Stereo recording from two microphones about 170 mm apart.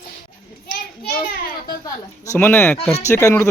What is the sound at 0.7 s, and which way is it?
Children playing, 65° left (ahead or behind).